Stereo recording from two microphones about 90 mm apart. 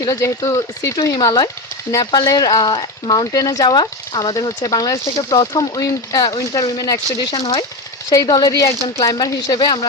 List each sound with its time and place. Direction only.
0.0 s speech: 40° left (ahead or behind)
3.3 s speech: 45° left (ahead or behind)